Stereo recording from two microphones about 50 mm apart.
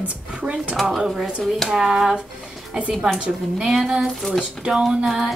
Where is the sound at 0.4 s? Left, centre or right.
Right.